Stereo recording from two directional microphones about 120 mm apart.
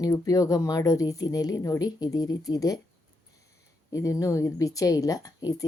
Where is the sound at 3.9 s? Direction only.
25° left (ahead or behind).